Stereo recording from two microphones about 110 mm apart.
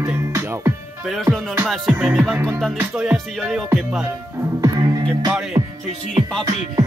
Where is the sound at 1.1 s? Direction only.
Centre (ahead or behind).